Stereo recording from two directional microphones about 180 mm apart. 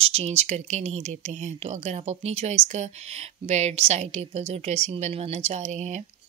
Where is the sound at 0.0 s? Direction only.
35° right (ahead or behind).